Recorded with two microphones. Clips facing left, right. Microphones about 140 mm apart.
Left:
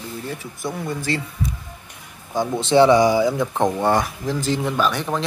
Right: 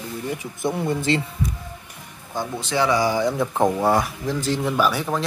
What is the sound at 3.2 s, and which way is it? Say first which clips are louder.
Speech: left 1 dB; centre (ahead or behind).